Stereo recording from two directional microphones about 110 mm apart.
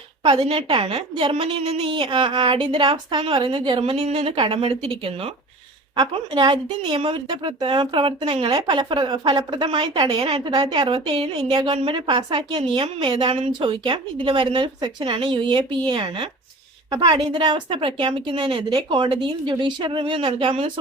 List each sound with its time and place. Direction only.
0.2 s a woman's voice: 45° right (ahead or behind)
3.9 s speech: 65° right (ahead or behind)
4.4 s speech: 50° right (ahead or behind)
6.0 s a woman's voice: 45° right (ahead or behind)
10.2 s speech: 60° right (ahead or behind)
10.6 s speech: 50° right (ahead or behind)
11.4 s speech: 40° right (ahead or behind)
11.7 s a woman's voice: 50° right (ahead or behind)